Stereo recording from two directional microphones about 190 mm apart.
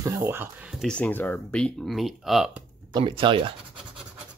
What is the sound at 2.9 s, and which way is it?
Speech, 25° right (ahead or behind).